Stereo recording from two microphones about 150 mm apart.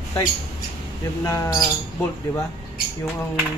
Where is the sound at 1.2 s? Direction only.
20° left (ahead or behind).